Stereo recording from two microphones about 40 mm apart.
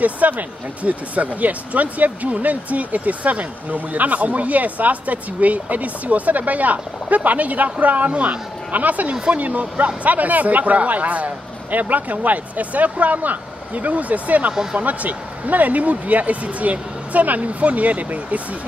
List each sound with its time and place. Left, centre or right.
0.0 s speech: right
14.5 s speech: centre
14.8 s speech: right